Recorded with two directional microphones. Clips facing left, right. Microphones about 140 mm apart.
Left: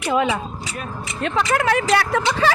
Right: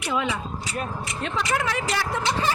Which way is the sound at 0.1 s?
55° left (ahead or behind).